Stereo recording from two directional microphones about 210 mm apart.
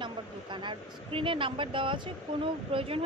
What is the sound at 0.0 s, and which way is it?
Speech, 20° right (ahead or behind).